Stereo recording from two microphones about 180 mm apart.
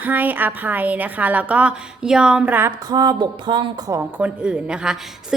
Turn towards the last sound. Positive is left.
turn(degrees=0)  # may be behind; listen again after turning